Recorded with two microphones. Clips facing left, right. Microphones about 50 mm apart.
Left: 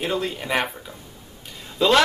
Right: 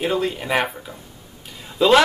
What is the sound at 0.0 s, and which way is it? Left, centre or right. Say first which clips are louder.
Speech: right 3 dB; centre.